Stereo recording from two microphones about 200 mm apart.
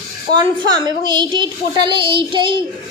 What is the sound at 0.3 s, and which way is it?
A woman's voice, 20° right (ahead or behind).